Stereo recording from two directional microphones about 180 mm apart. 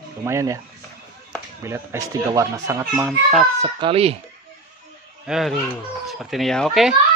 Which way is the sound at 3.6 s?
25° right (ahead or behind).